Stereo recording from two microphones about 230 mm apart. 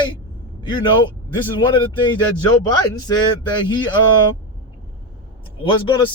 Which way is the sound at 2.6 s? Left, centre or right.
Centre.